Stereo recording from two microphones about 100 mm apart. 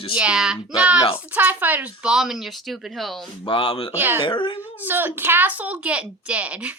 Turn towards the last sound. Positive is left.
turn(degrees=-15)  # may be behind; listen again after turning